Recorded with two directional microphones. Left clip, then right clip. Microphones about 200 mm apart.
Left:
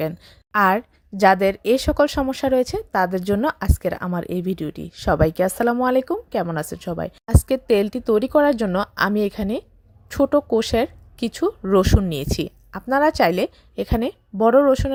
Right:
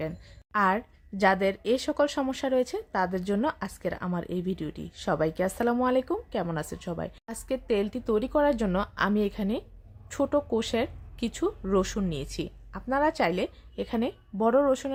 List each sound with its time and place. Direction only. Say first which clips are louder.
0.0 s a woman's voice: left 9 dB; 35° left (ahead or behind)